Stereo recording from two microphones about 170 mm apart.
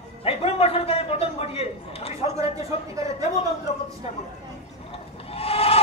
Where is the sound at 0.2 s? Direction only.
35° left (ahead or behind).